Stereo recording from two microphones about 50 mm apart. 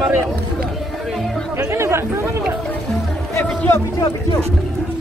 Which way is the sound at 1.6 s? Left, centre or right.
Right.